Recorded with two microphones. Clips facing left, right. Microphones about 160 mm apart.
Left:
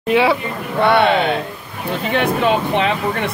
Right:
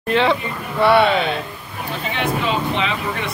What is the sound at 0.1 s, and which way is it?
Speech, 10° left (ahead or behind).